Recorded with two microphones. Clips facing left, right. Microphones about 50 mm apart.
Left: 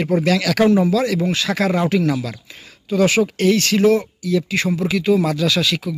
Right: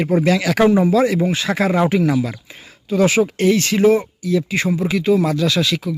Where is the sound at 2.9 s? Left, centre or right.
Centre.